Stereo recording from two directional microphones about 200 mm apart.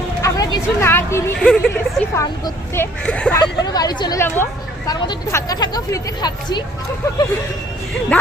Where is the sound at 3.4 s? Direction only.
20° left (ahead or behind).